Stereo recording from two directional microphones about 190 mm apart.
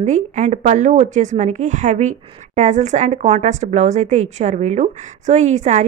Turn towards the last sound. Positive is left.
turn(degrees=-40)  # may be behind; listen again after turning